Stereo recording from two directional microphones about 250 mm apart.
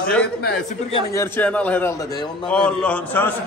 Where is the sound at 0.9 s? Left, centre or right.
Left.